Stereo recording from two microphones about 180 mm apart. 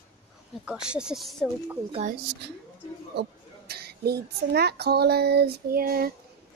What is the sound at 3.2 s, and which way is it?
A child's voice, 60° right (ahead or behind).